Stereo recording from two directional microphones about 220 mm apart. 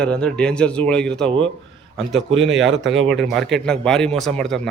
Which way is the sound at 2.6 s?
55° right (ahead or behind).